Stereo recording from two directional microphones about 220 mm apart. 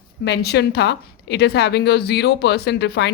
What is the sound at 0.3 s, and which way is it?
Speech, 50° left (ahead or behind).